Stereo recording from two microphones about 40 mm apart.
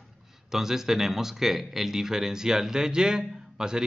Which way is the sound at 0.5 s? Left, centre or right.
Centre.